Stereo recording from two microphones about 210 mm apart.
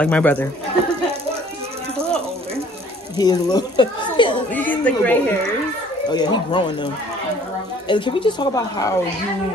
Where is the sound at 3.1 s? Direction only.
20° left (ahead or behind).